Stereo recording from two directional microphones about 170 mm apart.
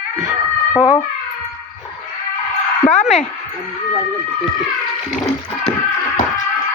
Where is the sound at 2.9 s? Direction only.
45° left (ahead or behind).